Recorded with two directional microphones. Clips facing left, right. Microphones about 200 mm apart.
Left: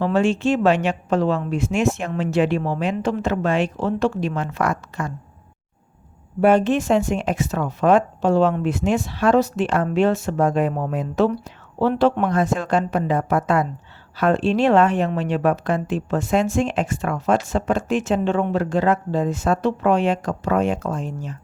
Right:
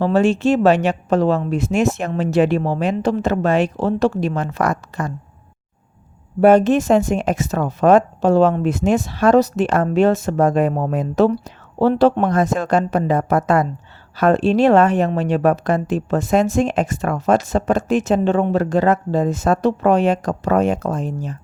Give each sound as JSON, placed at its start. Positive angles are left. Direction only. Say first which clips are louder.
{"t": 0.0, "sound": "speech", "louder": "right 3 dB", "side_deg": -40}
{"t": 6.4, "sound": "speech", "louder": "right 4 dB", "side_deg": -40}